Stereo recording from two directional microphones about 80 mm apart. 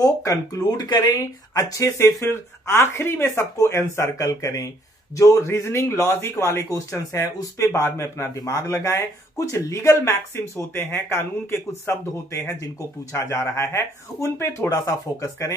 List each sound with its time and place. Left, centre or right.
0.0 s speech: left
2.2 s speech: left
5.1 s speech: left
6.7 s speech: left